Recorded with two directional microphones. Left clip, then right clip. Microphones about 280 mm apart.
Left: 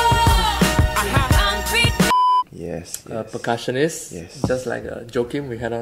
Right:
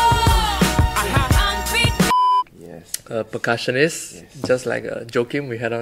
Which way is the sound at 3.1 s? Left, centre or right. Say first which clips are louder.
Right 2 dB; right.